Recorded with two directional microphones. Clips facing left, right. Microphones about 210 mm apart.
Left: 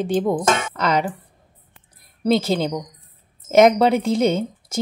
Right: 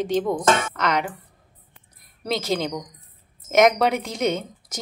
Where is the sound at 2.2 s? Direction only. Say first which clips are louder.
Left 6 dB; 30° left (ahead or behind).